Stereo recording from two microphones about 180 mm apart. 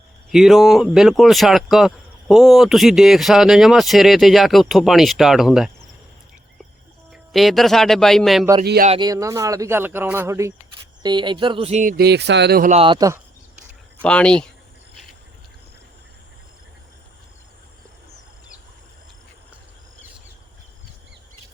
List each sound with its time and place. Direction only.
0.3 s speech: centre (ahead or behind)
7.1 s speech: centre (ahead or behind)
8.6 s speech: 60° right (ahead or behind)
8.9 s speech: 25° right (ahead or behind); by 12.6 s 65° right (ahead or behind)
12.6 s speech: 35° right (ahead or behind)
14.0 s speech: 5° left (ahead or behind)